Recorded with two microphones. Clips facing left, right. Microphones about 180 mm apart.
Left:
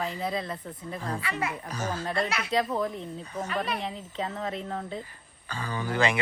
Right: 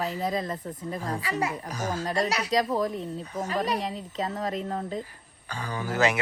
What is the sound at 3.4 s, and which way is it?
Speech, 35° right (ahead or behind).